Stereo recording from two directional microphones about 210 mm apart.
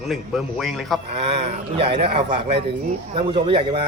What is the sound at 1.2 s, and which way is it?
A man's voice, 30° right (ahead or behind).